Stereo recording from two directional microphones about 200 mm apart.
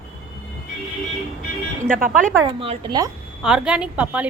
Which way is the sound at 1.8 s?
40° right (ahead or behind).